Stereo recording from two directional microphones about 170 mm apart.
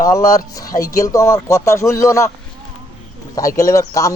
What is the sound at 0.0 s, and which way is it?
Speech, 20° left (ahead or behind).